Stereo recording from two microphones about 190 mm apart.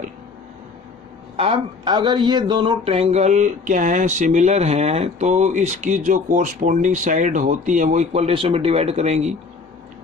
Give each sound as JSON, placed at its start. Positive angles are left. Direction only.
{"t": 1.4, "sound": "speech", "side_deg": -25}